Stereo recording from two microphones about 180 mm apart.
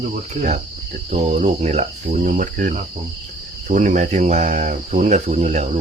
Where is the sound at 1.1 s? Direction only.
40° right (ahead or behind).